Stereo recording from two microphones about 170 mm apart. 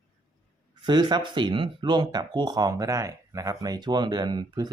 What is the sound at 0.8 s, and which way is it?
Speech, 25° right (ahead or behind).